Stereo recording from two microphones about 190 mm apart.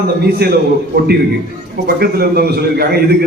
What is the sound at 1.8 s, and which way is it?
A man's voice, 55° right (ahead or behind).